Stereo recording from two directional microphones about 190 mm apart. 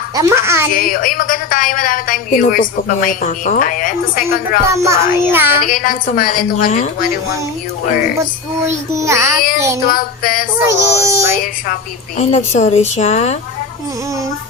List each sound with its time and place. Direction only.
0.2 s a child's voice: 15° right (ahead or behind)
0.8 s a woman's voice: 45° left (ahead or behind)
4.6 s a child's voice: 15° right (ahead or behind)
5.6 s a woman's voice: 45° left (ahead or behind)
8.6 s a child's voice: 15° right (ahead or behind)
9.9 s a woman's voice: 45° left (ahead or behind)
10.7 s a child's voice: 15° right (ahead or behind)
11.7 s a woman's voice: 40° left (ahead or behind)